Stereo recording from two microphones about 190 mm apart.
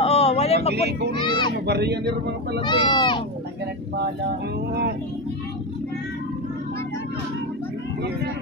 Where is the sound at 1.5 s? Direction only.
60° right (ahead or behind).